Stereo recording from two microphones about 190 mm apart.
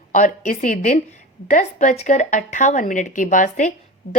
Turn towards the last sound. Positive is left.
turn(degrees=40)  # may be behind; listen again after turning